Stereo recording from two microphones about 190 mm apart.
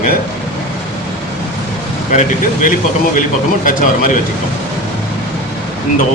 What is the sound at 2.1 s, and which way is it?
A man's voice, 40° left (ahead or behind).